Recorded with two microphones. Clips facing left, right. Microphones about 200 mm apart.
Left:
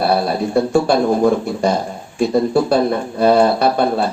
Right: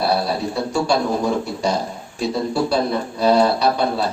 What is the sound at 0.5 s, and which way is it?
A man's voice, 55° left (ahead or behind).